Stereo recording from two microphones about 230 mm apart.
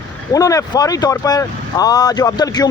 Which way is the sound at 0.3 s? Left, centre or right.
Centre.